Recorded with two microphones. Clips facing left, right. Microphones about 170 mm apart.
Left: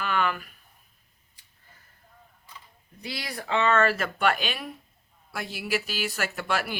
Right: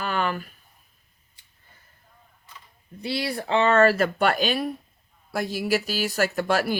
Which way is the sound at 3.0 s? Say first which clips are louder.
Right 8 dB; 30° right (ahead or behind).